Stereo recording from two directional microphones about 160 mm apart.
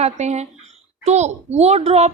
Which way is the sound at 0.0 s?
45° right (ahead or behind).